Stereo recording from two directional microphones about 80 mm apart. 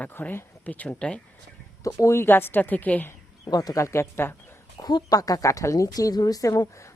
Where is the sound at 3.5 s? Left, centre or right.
Left.